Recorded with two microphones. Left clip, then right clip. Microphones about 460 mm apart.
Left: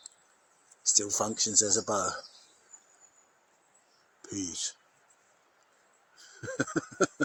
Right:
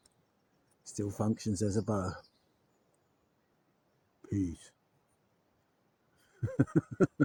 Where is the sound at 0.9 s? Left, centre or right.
Right.